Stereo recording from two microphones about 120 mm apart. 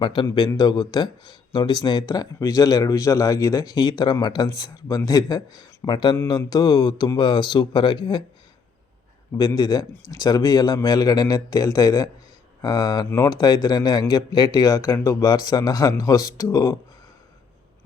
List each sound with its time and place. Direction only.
0.0 s speech: 45° left (ahead or behind)
9.6 s speech: 35° left (ahead or behind)
13.1 s speech: 20° left (ahead or behind)